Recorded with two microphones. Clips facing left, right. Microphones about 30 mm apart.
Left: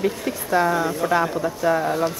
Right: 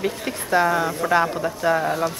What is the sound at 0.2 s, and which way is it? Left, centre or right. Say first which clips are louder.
Speech: even; right.